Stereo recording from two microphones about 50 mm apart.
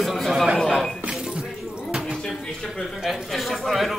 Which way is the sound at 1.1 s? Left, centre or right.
Centre.